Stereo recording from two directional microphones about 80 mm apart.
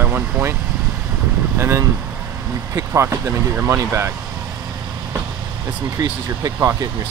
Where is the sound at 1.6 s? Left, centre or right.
Right.